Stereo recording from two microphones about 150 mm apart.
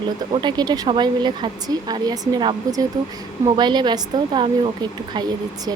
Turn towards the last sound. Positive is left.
turn(degrees=-30)  # may be behind; listen again after turning